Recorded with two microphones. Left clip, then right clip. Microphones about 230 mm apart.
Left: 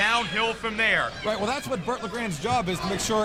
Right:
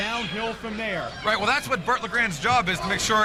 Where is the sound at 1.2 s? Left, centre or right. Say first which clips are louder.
Right 4 dB; right.